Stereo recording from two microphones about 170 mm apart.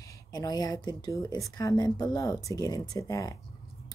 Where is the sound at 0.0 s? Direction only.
20° left (ahead or behind).